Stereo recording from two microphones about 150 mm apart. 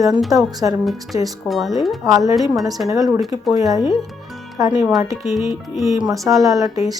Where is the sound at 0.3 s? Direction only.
25° right (ahead or behind).